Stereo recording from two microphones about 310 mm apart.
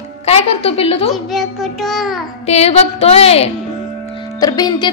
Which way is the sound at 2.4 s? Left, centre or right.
Centre.